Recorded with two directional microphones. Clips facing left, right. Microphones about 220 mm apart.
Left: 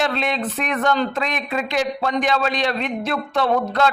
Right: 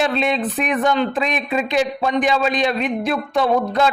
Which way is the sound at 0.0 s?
20° right (ahead or behind).